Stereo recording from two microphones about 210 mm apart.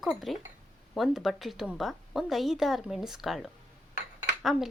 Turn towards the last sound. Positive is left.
turn(degrees=0)  # may be behind; listen again after turning